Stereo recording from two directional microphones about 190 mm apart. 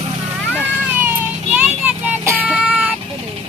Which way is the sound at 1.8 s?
10° right (ahead or behind).